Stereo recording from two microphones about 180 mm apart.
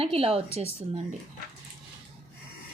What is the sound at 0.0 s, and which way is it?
A woman's voice, 30° right (ahead or behind).